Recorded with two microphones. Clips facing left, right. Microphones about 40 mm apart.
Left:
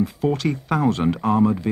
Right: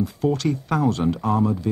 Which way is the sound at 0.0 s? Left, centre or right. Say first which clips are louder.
Left 1 dB; centre.